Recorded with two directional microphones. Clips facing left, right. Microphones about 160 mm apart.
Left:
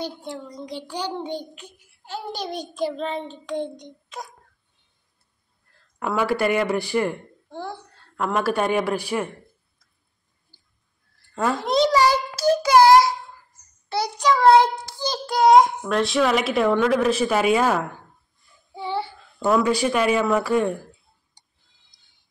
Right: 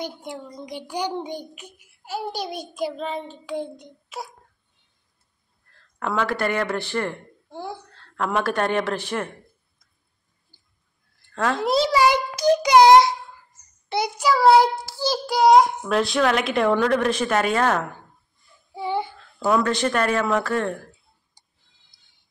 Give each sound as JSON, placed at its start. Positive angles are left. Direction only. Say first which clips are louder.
{"t": 0.0, "sound": "a child's voice", "louder": "left 1 dB", "side_deg": -15}
{"t": 5.9, "sound": "speech", "louder": "left 2 dB", "side_deg": 10}
{"t": 11.6, "sound": "a child's voice", "louder": "even", "side_deg": -5}
{"t": 14.3, "sound": "speech", "louder": "even", "side_deg": -5}
{"t": 18.7, "sound": "child singing", "louder": "right 2 dB", "side_deg": -15}
{"t": 19.6, "sound": "speech", "louder": "left 2 dB", "side_deg": 10}
{"t": 21.4, "sound": "tick-tock", "louder": "left 1 dB", "side_deg": -10}